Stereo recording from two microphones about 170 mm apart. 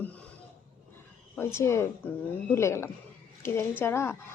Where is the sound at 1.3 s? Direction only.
15° left (ahead or behind).